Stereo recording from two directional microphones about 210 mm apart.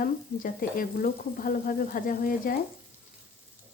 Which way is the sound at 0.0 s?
40° left (ahead or behind).